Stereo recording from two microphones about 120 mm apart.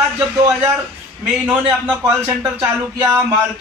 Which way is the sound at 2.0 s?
20° right (ahead or behind).